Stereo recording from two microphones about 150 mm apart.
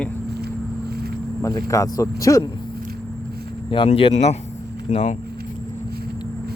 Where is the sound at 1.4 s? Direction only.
20° left (ahead or behind).